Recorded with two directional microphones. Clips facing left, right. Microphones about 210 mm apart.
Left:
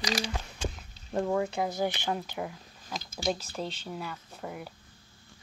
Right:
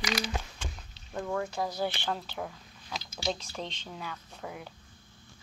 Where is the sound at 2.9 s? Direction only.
45° left (ahead or behind).